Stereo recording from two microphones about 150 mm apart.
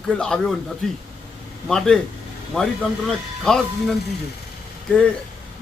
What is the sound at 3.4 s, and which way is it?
Speech, 5° left (ahead or behind).